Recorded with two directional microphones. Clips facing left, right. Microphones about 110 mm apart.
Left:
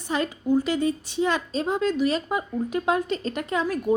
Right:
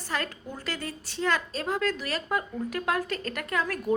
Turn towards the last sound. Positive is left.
turn(degrees=20)  # may be behind; listen again after turning